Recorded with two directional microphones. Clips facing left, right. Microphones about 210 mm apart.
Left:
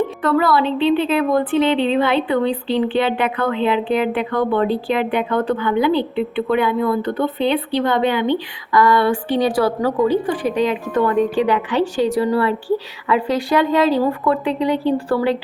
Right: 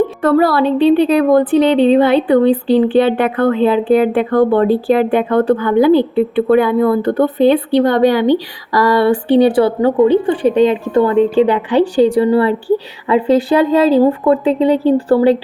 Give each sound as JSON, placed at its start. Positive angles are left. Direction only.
{"t": 0.3, "sound": "a woman's voice", "side_deg": -45}